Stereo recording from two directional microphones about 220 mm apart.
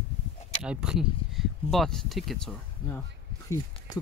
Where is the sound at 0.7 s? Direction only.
5° right (ahead or behind).